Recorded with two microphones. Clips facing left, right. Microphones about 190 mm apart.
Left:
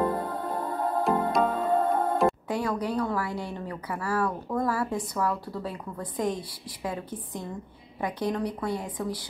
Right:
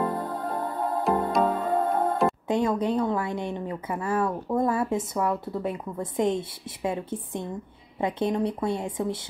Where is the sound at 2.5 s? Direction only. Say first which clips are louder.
Right 4 dB; 20° right (ahead or behind).